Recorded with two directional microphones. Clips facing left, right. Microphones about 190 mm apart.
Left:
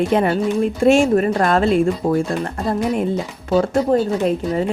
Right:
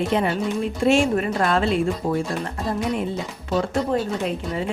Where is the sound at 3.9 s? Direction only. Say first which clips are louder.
Left 6 dB; 45° left (ahead or behind).